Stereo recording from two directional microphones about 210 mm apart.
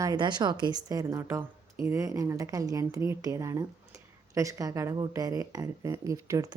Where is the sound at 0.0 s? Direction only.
20° right (ahead or behind).